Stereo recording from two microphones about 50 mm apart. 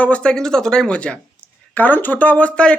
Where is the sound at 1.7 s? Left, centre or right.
Left.